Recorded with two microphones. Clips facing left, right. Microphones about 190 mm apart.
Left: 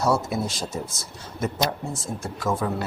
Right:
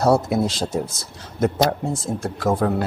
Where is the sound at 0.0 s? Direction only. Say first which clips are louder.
Right 6 dB; 65° right (ahead or behind).